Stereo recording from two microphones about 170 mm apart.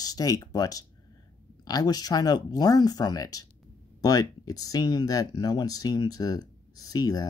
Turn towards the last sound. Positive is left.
turn(degrees=25)  # may be behind; listen again after turning